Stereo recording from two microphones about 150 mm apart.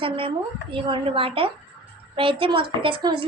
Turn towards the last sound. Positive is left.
turn(degrees=-35)  # may be behind; listen again after turning